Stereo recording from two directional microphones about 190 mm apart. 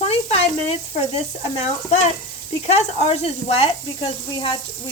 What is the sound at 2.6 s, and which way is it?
Speech, 35° left (ahead or behind).